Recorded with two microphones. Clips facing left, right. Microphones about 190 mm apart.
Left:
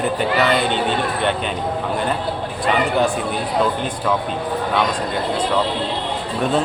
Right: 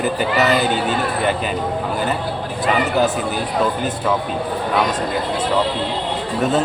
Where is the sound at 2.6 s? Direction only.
5° right (ahead or behind).